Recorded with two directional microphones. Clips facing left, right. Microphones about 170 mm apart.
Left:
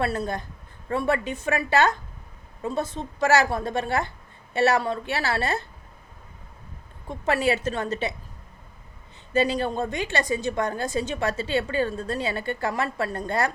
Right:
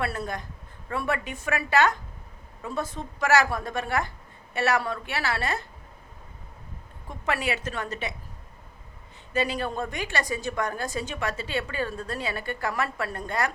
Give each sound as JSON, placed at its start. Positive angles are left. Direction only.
{"t": 0.0, "sound": "a woman's voice", "side_deg": 25}
{"t": 7.1, "sound": "a woman's voice", "side_deg": 30}
{"t": 9.3, "sound": "a woman's voice", "side_deg": 30}